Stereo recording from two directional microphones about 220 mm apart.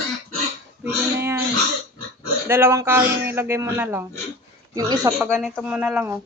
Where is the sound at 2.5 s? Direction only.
10° right (ahead or behind).